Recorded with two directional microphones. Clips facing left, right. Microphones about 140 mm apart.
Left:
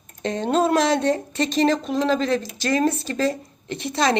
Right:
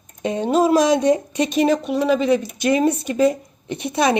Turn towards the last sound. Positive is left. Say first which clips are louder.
# right 3 dB
turn(degrees=-15)  # may be behind; listen again after turning